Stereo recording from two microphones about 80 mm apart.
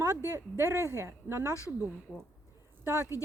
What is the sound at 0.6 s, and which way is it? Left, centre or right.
Speech, right.